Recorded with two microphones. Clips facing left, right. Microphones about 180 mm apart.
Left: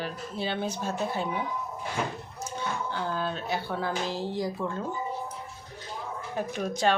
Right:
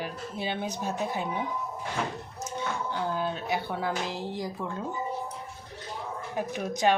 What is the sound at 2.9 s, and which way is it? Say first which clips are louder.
Speech: right 2 dB; 20° right (ahead or behind).